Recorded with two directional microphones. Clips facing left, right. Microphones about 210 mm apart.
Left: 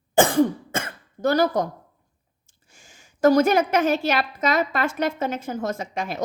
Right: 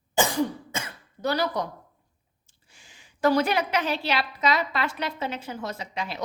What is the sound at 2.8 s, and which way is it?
A woman's voice, 45° left (ahead or behind).